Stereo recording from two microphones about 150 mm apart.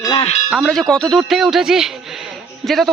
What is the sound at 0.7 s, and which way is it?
Speech, 5° left (ahead or behind).